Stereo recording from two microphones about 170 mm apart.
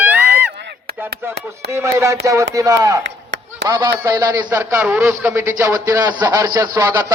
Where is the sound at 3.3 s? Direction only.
90° right.